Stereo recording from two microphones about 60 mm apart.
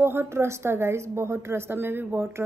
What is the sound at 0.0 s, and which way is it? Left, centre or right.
A woman's voice, right.